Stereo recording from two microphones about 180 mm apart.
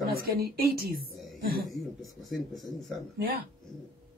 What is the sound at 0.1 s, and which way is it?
A woman's voice, 60° right (ahead or behind).